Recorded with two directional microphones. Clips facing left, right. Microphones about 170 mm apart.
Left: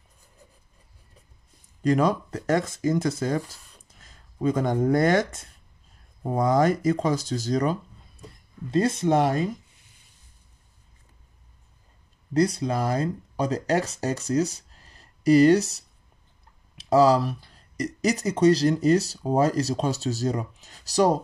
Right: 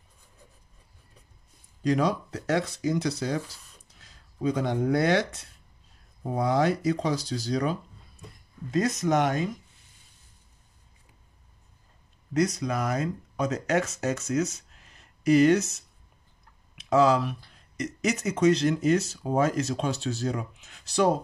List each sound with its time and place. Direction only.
1.8 s speech: 50° left (ahead or behind)
8.6 s speech: 30° left (ahead or behind)
12.4 s speech: 30° left (ahead or behind)